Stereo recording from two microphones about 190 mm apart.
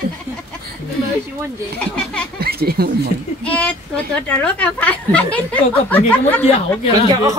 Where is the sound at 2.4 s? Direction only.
55° right (ahead or behind).